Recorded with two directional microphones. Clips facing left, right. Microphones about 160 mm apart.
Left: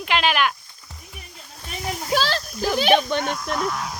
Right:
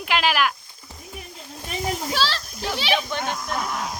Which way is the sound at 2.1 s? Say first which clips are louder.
Left 3 dB; 50° left (ahead or behind).